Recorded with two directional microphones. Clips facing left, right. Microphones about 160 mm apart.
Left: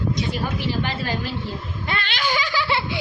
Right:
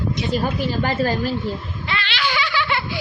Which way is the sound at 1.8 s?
45° left (ahead or behind).